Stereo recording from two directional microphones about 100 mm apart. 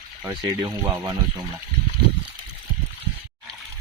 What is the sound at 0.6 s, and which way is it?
Speech, 40° right (ahead or behind).